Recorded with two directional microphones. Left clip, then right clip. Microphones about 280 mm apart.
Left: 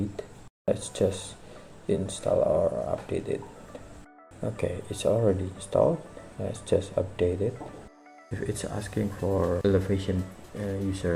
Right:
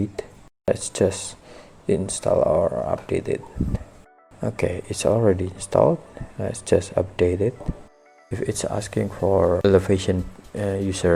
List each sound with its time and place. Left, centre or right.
0.2 s a sound: right
0.9 s speech: right
4.4 s speech: right